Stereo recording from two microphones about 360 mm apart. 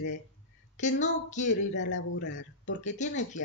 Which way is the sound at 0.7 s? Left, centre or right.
Centre.